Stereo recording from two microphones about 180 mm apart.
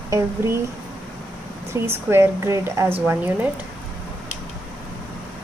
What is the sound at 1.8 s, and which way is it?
A woman's voice, 15° right (ahead or behind).